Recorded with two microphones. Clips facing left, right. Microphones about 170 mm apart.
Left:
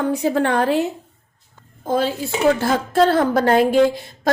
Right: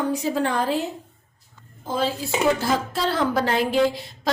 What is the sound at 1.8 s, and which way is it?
A woman's voice, 55° left (ahead or behind).